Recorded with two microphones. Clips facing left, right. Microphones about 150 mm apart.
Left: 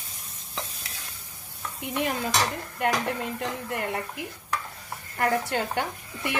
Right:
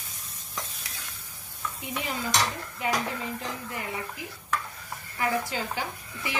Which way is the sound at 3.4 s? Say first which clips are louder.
Left 5 dB; 65° left (ahead or behind).